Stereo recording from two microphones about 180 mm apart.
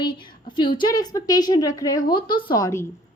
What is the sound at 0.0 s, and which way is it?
A woman's voice, 25° left (ahead or behind).